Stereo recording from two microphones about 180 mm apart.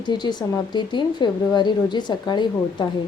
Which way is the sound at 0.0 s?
25° left (ahead or behind).